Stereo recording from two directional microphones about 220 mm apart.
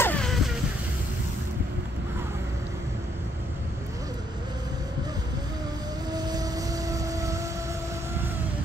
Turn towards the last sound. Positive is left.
turn(degrees=-15)  # may be behind; listen again after turning